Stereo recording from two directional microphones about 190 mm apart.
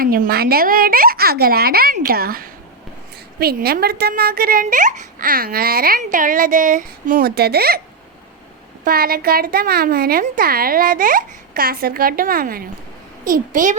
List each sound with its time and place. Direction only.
0.0 s a child's voice: 50° right (ahead or behind)
8.8 s a child's voice: 50° right (ahead or behind)